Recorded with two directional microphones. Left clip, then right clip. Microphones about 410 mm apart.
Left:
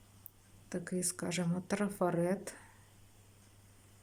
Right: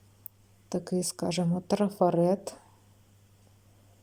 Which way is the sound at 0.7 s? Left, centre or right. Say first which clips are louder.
Right 8 dB; centre.